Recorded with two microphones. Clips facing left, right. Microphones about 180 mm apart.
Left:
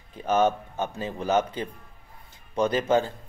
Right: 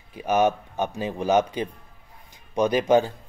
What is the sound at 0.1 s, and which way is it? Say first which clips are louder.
Speech: right 1 dB; 10° right (ahead or behind).